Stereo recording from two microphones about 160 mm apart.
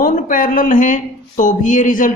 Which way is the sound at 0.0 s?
55° left (ahead or behind).